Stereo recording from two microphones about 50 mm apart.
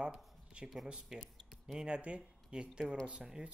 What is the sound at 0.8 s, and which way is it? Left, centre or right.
Speech, centre.